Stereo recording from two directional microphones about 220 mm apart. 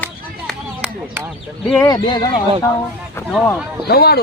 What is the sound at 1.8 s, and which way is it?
Speech, 20° left (ahead or behind).